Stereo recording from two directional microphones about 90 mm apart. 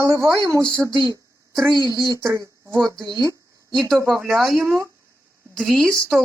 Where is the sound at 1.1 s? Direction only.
35° right (ahead or behind).